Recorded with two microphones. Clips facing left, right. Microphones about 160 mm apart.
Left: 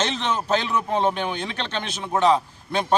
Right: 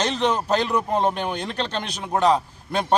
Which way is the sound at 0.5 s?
40° right (ahead or behind).